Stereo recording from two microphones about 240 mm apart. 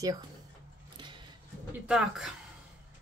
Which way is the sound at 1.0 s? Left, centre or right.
Centre.